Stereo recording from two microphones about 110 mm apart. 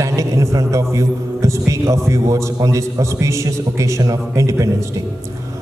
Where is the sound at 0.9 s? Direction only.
30° right (ahead or behind).